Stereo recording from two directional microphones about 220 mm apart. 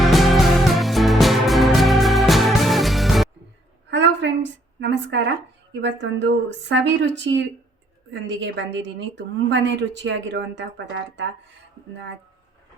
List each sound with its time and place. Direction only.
0.0 s music: centre (ahead or behind)
3.8 s a sound: 55° right (ahead or behind)
4.8 s a woman's voice: 55° right (ahead or behind)